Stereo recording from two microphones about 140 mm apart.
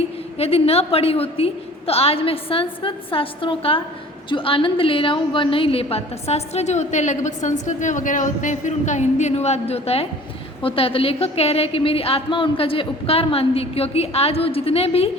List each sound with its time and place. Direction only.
0.3 s a woman's voice: 45° left (ahead or behind)